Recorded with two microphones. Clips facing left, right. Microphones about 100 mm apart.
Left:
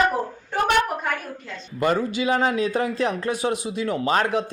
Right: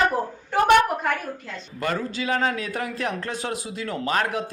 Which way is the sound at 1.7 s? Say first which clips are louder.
Left 5 dB; 20° left (ahead or behind).